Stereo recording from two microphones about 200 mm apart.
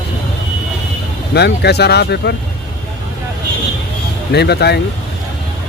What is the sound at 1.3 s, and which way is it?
Speech, 55° left (ahead or behind).